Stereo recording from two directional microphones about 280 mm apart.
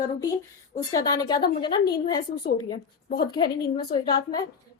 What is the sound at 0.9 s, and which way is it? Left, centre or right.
A woman's voice, centre.